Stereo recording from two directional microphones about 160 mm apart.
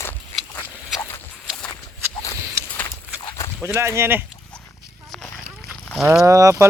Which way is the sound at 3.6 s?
15° right (ahead or behind).